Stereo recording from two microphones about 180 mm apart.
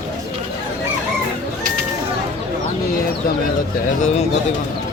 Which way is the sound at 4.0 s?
40° left (ahead or behind).